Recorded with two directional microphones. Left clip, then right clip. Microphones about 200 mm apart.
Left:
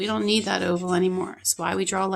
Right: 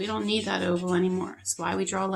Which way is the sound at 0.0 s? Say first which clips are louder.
Left 4 dB; 40° left (ahead or behind).